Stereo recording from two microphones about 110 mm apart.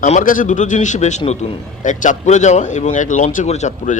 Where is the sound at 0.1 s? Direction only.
90° left.